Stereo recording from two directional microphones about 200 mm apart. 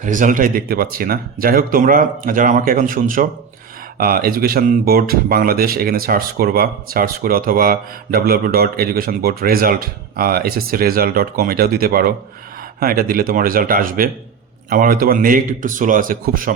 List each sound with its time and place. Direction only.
0.0 s speech: 40° right (ahead or behind)